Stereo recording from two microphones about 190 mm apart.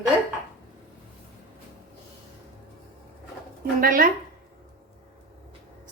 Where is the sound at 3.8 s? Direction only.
45° right (ahead or behind).